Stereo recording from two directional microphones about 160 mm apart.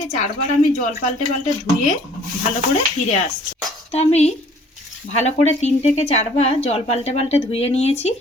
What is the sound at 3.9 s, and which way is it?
Speech, 40° left (ahead or behind).